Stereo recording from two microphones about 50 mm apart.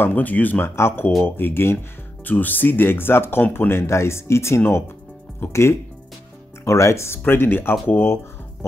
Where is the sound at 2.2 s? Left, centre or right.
Left.